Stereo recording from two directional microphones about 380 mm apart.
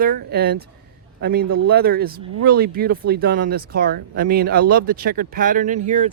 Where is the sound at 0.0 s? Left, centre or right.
Right.